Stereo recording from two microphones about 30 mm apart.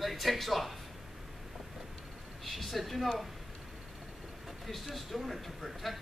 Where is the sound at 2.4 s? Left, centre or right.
Centre.